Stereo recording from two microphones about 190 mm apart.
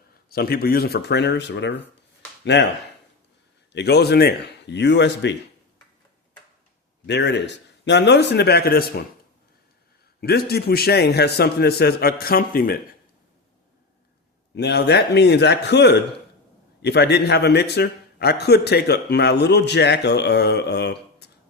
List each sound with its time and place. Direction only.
0.3 s a man's voice: 55° left (ahead or behind)
3.7 s a man's voice: 60° left (ahead or behind)
7.1 s a man's voice: 65° left (ahead or behind)
10.2 s a man's voice: 55° left (ahead or behind)
14.5 s a man's voice: 60° left (ahead or behind)